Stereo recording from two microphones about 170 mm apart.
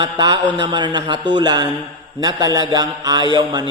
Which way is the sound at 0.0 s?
25° right (ahead or behind).